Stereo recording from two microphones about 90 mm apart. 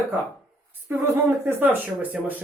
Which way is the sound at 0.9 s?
25° right (ahead or behind).